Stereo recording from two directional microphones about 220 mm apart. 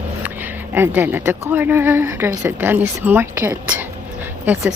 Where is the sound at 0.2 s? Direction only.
10° right (ahead or behind).